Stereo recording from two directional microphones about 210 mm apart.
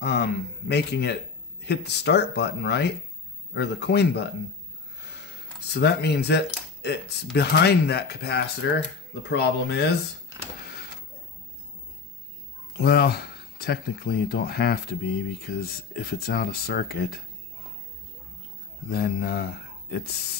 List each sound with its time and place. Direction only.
0.0 s speech: 50° left (ahead or behind)
4.9 s a sound: 55° left (ahead or behind)
7.3 s speech: 50° left (ahead or behind)
12.7 s speech: 50° left (ahead or behind)
18.9 s speech: 50° left (ahead or behind)